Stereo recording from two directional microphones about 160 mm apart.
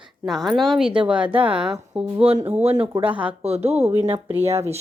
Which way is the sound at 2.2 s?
35° right (ahead or behind).